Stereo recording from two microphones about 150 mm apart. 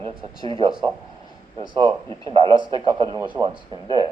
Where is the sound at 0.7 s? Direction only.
5° right (ahead or behind).